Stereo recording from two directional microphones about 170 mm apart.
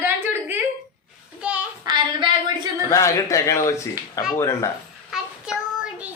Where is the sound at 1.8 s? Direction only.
25° right (ahead or behind).